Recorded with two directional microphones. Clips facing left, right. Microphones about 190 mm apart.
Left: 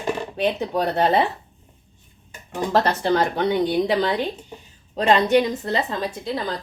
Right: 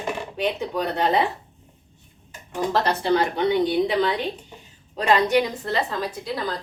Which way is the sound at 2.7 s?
45° left (ahead or behind).